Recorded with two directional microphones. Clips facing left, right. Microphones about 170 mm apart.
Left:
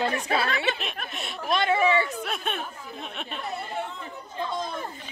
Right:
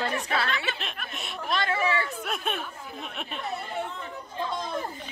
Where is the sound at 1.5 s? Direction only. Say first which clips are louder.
Left 5 dB; 20° left (ahead or behind).